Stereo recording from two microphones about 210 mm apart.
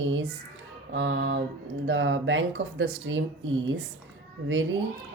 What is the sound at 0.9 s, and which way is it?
Speech, 60° right (ahead or behind).